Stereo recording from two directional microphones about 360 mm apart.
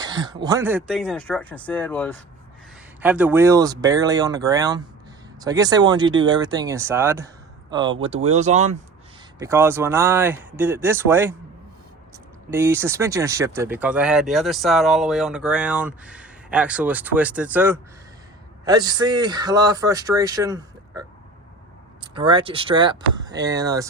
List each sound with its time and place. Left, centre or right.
0.0 s speech: centre
9.4 s speech: centre
12.5 s speech: centre
22.0 s speech: centre